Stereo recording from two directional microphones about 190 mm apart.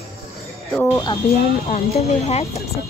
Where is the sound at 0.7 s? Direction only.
10° left (ahead or behind).